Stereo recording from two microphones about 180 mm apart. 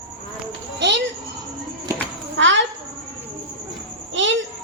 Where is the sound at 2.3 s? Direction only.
90° right.